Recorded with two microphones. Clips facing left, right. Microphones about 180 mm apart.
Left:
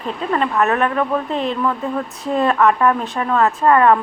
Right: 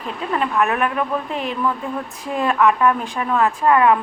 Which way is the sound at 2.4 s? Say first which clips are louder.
Left 1 dB; centre (ahead or behind).